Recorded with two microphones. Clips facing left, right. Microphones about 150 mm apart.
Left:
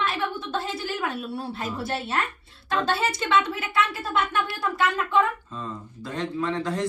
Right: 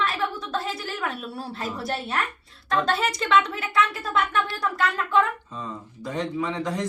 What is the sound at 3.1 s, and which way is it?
Speech, 25° left (ahead or behind).